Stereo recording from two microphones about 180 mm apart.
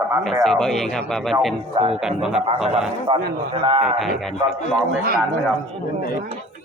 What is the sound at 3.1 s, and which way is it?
Speech, 30° right (ahead or behind).